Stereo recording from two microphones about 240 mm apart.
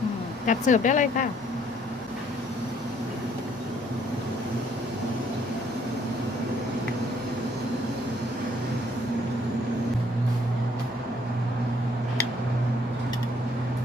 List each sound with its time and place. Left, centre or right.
0.4 s speech: left